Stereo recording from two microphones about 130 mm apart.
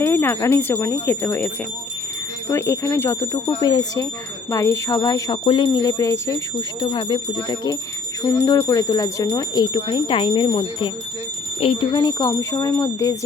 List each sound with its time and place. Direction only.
0.0 s speech: 15° left (ahead or behind)
2.5 s speech: 20° left (ahead or behind)